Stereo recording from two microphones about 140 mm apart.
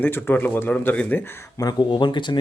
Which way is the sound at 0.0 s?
15° left (ahead or behind).